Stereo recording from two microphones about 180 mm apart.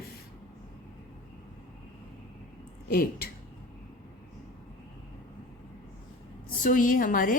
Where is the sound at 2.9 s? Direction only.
55° left (ahead or behind).